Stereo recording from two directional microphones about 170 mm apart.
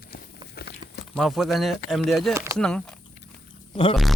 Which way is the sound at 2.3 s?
15° right (ahead or behind).